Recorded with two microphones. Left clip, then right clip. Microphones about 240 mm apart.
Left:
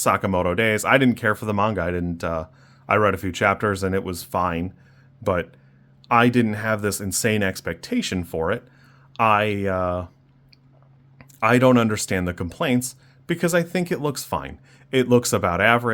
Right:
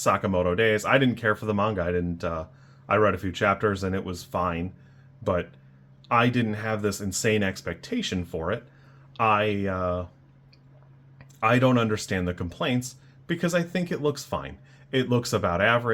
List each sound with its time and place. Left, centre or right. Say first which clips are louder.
0.0 s speech: left 3 dB; left
11.2 s speech: left 4 dB; left